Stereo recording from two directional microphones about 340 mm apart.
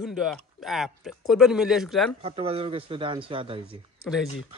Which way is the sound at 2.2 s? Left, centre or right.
Centre.